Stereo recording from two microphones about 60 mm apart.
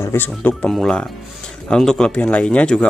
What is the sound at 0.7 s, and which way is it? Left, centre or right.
Speech, centre.